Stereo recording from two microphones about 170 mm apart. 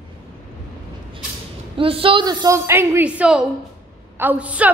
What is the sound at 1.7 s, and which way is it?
A woman's voice, 30° right (ahead or behind).